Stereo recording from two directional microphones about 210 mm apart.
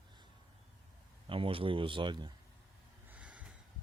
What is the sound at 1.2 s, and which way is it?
A man's voice, 25° right (ahead or behind).